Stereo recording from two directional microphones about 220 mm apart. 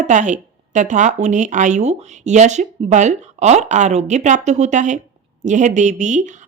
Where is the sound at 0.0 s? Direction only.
35° right (ahead or behind).